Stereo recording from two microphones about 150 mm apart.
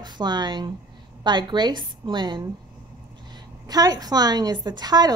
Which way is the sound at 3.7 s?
25° right (ahead or behind).